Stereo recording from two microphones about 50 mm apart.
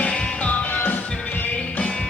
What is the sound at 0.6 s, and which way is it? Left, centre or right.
Music, left.